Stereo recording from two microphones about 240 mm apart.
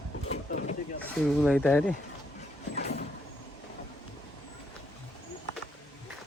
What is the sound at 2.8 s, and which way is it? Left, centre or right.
Vehicle, left.